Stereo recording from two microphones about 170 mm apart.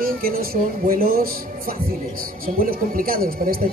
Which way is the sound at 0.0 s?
60° right (ahead or behind).